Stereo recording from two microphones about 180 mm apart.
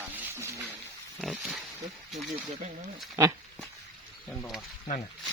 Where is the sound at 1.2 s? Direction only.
Centre (ahead or behind).